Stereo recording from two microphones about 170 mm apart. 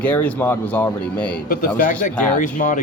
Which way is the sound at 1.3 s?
55° left (ahead or behind).